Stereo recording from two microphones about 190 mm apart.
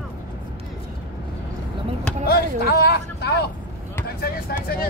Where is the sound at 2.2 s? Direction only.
55° left (ahead or behind).